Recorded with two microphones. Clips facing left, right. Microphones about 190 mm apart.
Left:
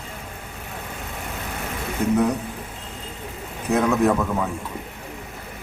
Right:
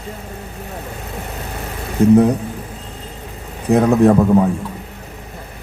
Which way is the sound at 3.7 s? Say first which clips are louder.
Right 7 dB; 35° right (ahead or behind).